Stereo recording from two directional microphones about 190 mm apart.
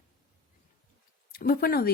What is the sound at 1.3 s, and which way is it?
Speech, 55° left (ahead or behind).